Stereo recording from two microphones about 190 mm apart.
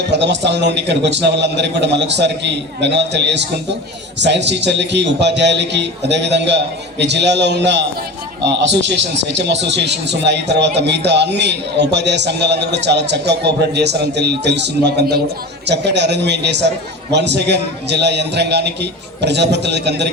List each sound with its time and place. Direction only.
0.1 s a man's voice: 65° right (ahead or behind)